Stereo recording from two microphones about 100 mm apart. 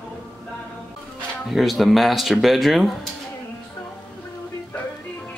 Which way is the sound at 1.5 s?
Centre (ahead or behind).